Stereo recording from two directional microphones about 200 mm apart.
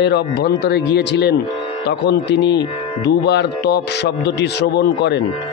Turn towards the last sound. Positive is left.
turn(degrees=55)  # may be behind; listen again after turning